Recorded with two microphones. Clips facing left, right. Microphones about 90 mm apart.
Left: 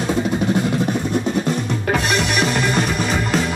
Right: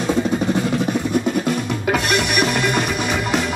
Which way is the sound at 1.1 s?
5° right (ahead or behind).